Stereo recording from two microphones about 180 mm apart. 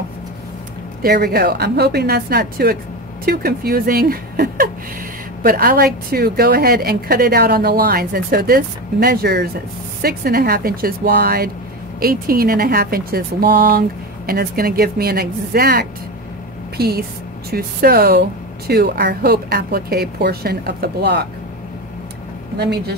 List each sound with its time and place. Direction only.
1.0 s a woman's voice: 60° right (ahead or behind)
22.6 s a woman's voice: 70° right (ahead or behind)